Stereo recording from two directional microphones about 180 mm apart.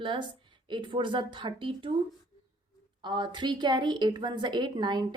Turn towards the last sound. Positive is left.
turn(degrees=-25)  # may be behind; listen again after turning